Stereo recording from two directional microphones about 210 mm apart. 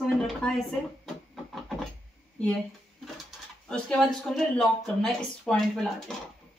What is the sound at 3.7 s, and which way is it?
Speech, 5° left (ahead or behind).